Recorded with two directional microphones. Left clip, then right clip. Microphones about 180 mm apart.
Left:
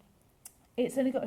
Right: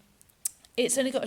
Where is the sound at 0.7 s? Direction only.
30° right (ahead or behind).